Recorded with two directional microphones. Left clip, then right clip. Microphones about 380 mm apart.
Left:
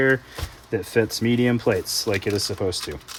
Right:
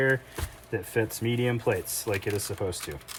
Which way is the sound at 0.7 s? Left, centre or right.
Left.